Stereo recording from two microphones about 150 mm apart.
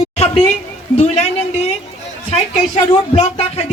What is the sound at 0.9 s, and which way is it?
Speech, 45° left (ahead or behind).